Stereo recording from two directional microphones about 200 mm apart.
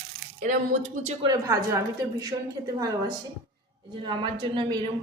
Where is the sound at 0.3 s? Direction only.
40° right (ahead or behind).